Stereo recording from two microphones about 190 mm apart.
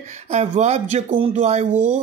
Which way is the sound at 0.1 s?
35° right (ahead or behind).